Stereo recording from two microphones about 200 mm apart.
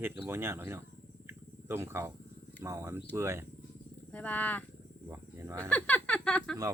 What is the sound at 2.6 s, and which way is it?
Speech, 15° right (ahead or behind).